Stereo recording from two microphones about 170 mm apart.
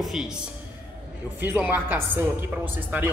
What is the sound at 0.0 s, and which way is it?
Speech, centre (ahead or behind).